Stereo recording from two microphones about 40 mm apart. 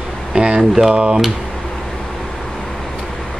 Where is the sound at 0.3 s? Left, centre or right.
Right.